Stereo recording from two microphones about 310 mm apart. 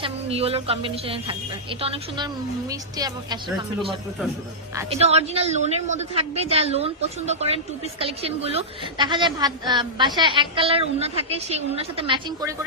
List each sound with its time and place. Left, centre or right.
0.0 s a woman's voice: centre
4.7 s a woman's voice: centre